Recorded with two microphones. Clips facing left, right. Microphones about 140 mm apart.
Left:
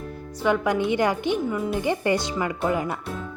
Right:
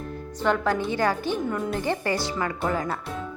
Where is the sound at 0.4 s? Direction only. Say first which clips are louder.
Left 2 dB; 10° left (ahead or behind).